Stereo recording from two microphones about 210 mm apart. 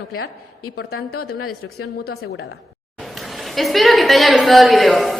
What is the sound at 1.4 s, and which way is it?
Speech, 90° left.